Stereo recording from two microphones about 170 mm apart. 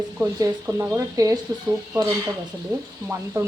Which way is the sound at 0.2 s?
15° right (ahead or behind).